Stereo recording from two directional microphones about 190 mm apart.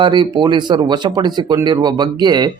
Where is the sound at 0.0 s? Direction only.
25° right (ahead or behind).